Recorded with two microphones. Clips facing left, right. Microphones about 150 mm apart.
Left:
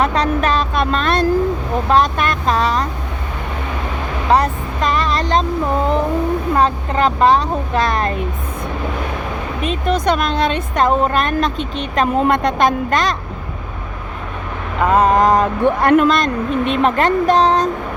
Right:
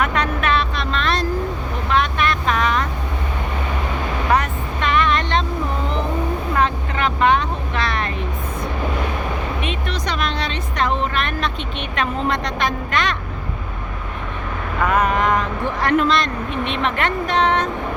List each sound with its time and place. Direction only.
0.0 s a sound: 35° left (ahead or behind)
1.9 s speech: 40° left (ahead or behind)
4.3 s vehicle: 35° left (ahead or behind)
6.6 s a woman's voice: 35° left (ahead or behind)
9.6 s a woman's voice: 40° left (ahead or behind)
14.8 s a woman's voice: 30° left (ahead or behind)
15.6 s a woman's voice: 50° left (ahead or behind)